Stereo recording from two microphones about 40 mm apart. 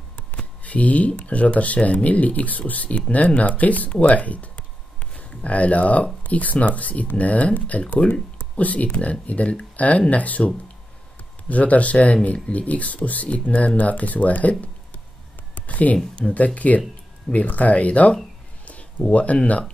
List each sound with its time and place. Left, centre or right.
0.7 s speech: left
15.5 s speech: left